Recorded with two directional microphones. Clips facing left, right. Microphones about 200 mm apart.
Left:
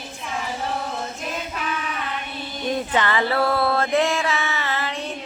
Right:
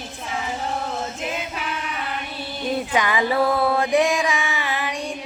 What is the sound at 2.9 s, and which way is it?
Mantra, 15° right (ahead or behind).